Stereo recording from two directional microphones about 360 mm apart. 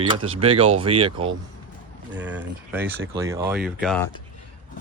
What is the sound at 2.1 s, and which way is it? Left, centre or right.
Speech, centre.